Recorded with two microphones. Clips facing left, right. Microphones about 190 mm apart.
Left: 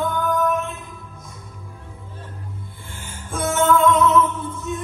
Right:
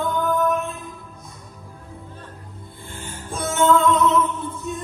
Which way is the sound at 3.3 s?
35° right (ahead or behind).